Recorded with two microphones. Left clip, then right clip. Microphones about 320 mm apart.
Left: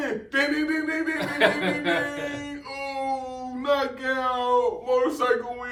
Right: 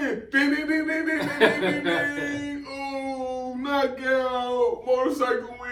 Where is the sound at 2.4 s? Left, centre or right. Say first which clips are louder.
Right 1 dB; centre.